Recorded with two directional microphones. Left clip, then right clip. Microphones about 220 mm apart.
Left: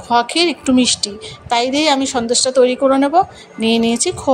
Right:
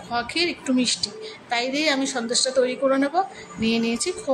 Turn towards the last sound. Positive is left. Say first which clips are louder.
# left 8 dB
turn(degrees=30)  # may be behind; listen again after turning